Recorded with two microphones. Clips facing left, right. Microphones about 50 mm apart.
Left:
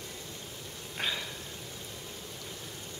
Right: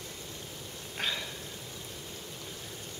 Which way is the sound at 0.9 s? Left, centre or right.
Centre.